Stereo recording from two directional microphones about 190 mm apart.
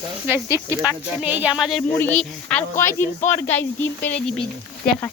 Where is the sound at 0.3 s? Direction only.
10° right (ahead or behind).